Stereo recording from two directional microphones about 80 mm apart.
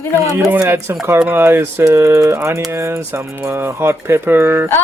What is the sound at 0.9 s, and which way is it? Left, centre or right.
Speech, right.